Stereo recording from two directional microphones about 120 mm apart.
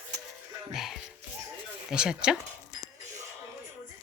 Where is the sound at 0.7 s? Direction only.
5° right (ahead or behind).